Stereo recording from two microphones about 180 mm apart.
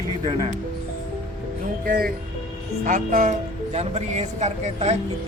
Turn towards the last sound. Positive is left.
turn(degrees=-35)  # may be behind; listen again after turning